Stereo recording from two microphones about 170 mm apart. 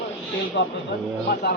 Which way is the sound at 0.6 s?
90° left.